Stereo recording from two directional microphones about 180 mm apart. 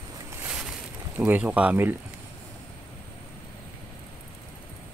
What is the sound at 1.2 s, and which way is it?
Speech, 5° right (ahead or behind).